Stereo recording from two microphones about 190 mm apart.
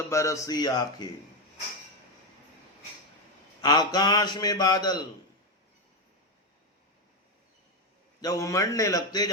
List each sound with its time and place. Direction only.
0.1 s a man's voice: 15° left (ahead or behind)
3.6 s a man's voice: 20° left (ahead or behind)
8.2 s a man's voice: 20° left (ahead or behind)